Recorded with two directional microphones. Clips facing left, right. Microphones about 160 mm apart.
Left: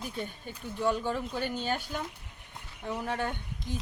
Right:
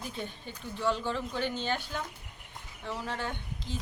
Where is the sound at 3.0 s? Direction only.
50° left (ahead or behind).